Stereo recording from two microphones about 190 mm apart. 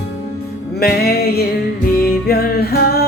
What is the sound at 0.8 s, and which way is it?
Music, 55° left (ahead or behind).